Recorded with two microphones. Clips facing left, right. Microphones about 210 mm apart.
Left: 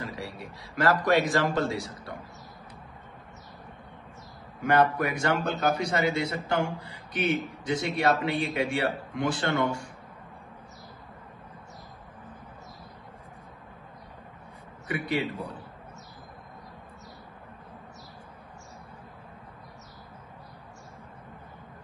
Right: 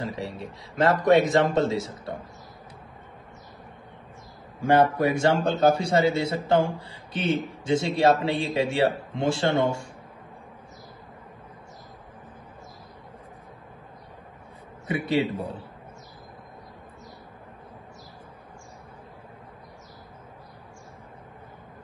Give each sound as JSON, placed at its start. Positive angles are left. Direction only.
{"t": 0.0, "sound": "a man's voice", "side_deg": -20}
{"t": 4.6, "sound": "a man's voice", "side_deg": -25}
{"t": 14.9, "sound": "a man's voice", "side_deg": -25}